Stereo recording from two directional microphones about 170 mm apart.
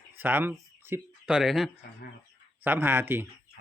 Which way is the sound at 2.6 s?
10° right (ahead or behind).